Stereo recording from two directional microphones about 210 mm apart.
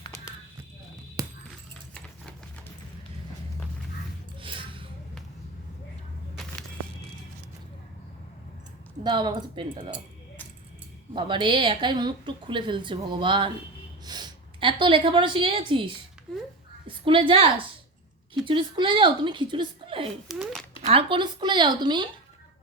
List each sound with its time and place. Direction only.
0.0 s a sound: 15° left (ahead or behind)
1.2 s music: 15° right (ahead or behind)
4.4 s music: 25° right (ahead or behind)
6.3 s vehicle: 5° left (ahead or behind)
9.0 s a woman's voice: 20° right (ahead or behind)
11.1 s a woman's voice: 25° right (ahead or behind)
20.2 s speech: centre (ahead or behind)
20.8 s a woman's voice: 25° right (ahead or behind)